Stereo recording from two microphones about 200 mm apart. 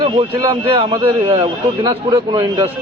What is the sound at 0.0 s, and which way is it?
A man's voice, 25° right (ahead or behind).